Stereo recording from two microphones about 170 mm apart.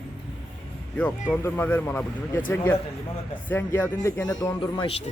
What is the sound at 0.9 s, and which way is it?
Speech, 10° left (ahead or behind).